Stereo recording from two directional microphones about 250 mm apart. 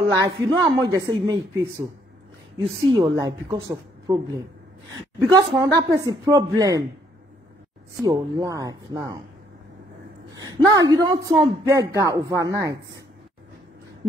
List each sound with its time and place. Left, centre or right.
0.2 s a woman's voice: centre
3.0 s a woman's voice: centre
8.0 s a woman's voice: centre
10.3 s a woman's voice: centre